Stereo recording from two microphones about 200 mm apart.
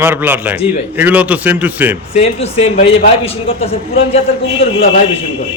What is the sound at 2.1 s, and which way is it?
A man's voice, 30° left (ahead or behind).